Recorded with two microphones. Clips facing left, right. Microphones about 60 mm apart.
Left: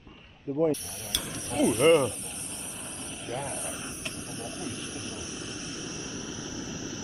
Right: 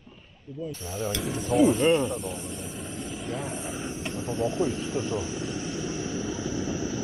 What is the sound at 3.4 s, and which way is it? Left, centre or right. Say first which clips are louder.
Speech: right 3 dB; centre.